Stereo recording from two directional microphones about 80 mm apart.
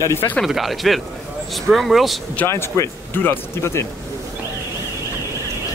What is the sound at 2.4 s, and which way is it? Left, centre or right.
Speech, left.